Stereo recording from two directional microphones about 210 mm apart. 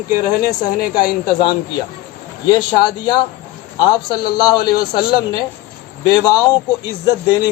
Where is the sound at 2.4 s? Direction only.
20° left (ahead or behind).